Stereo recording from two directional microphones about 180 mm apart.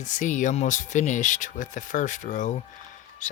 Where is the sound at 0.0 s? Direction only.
45° left (ahead or behind).